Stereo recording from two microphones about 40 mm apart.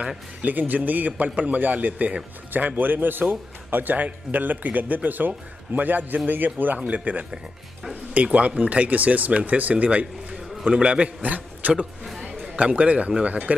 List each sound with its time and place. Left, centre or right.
0.4 s a man's voice: right
10.6 s speech: right
11.2 s a man's voice: right
12.0 s a sound: centre
12.5 s speech: right